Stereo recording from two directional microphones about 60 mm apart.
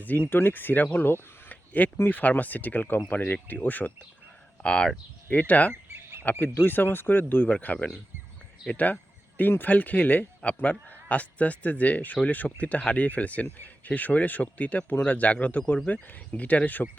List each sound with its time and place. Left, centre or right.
0.0 s speech: left
1.5 s a sound: left
2.0 s speech: left
4.6 s speech: centre
5.9 s a sound: right
6.4 s speech: left